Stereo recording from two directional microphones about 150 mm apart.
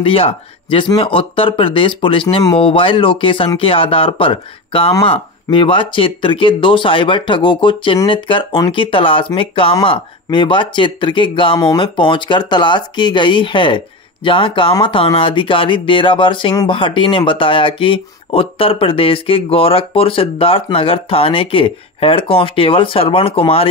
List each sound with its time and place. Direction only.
0.0 s speech: 35° left (ahead or behind)